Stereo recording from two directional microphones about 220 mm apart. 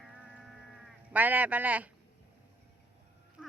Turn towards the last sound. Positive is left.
turn(degrees=-5)  # may be behind; listen again after turning